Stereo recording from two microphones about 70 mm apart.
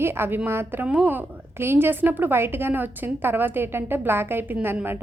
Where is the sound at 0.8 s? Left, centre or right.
Right.